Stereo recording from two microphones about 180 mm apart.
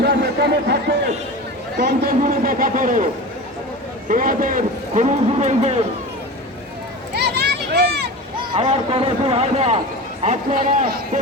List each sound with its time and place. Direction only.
0.0 s a sound: 65° right (ahead or behind)
1.7 s a man's voice: 65° right (ahead or behind)
2.2 s a man's voice: 50° right (ahead or behind)
4.1 s a man's voice: 50° right (ahead or behind)
7.1 s a sound: 65° right (ahead or behind)
8.4 s a man's voice: 30° right (ahead or behind); by 11.2 s 50° right (ahead or behind)